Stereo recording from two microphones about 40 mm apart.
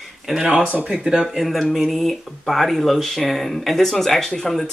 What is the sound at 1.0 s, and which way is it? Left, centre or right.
Speech, centre.